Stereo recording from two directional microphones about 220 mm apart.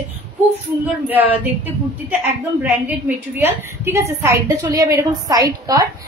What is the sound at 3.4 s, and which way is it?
A woman's voice, 10° right (ahead or behind).